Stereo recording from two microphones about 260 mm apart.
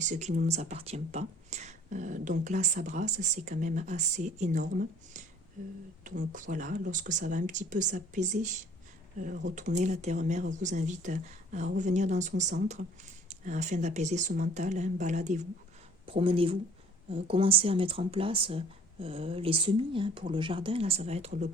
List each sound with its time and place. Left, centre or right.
0.0 s speech: right
13.4 s speech: right